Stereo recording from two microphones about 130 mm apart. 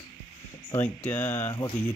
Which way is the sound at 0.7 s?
15° left (ahead or behind).